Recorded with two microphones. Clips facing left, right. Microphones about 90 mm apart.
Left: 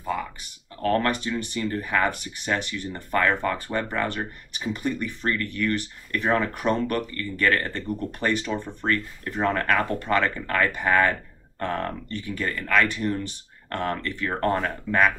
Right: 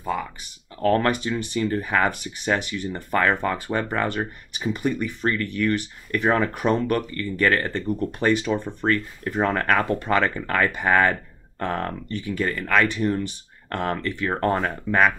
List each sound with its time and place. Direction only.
0.9 s speech: 15° right (ahead or behind)